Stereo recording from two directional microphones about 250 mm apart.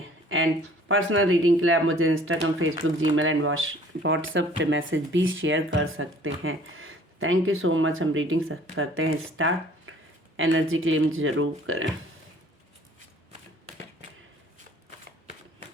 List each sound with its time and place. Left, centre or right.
0.9 s speech: right